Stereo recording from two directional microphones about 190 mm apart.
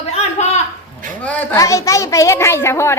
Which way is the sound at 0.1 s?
35° left (ahead or behind).